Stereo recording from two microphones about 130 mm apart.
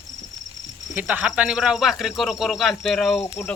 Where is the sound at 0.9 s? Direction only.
10° right (ahead or behind).